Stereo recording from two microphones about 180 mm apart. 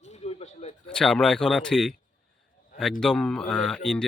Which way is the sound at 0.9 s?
5° left (ahead or behind).